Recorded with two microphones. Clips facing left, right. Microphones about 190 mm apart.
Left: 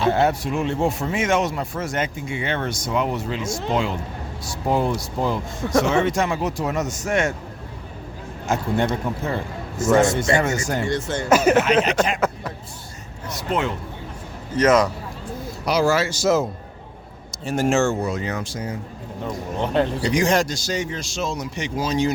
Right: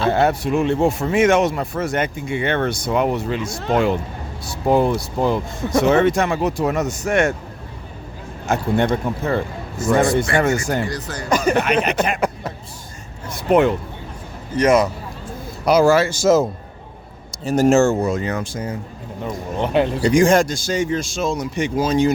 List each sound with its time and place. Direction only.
0.1 s speech: 60° right (ahead or behind)
8.4 s speech: 60° right (ahead or behind)
10.8 s speech: 25° left (ahead or behind)
11.3 s speech: 5° left (ahead or behind)
11.6 s speech: 60° right (ahead or behind)
12.2 s speech: 25° right (ahead or behind)
13.2 s speech: 55° right (ahead or behind)
14.5 s a man's voice: 10° right (ahead or behind)
15.6 s speech: 55° right (ahead or behind)
17.4 s speech: 40° right (ahead or behind)
19.5 s a man's voice: 15° right (ahead or behind)
20.0 s speech: 50° right (ahead or behind)